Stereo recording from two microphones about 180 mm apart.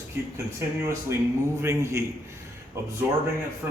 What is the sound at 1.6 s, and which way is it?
Speech, 15° right (ahead or behind).